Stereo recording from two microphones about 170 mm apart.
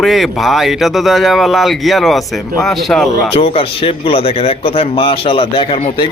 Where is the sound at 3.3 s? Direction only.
35° left (ahead or behind).